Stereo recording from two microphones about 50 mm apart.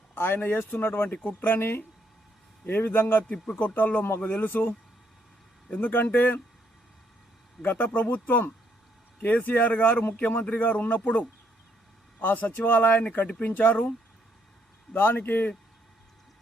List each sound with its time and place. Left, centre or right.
0.1 s a sound: left
0.3 s a man's voice: left
1.1 s speech: left
1.5 s a man's voice: left
3.2 s speech: left
7.6 s speech: left
14.9 s speech: left